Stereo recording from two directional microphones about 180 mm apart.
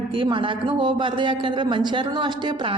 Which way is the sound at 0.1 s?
30° right (ahead or behind).